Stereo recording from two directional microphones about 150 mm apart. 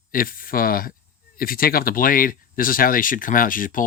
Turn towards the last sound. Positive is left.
turn(degrees=65)  # may be behind; listen again after turning